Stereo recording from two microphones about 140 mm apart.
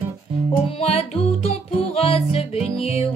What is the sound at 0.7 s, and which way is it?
Music, 45° left (ahead or behind).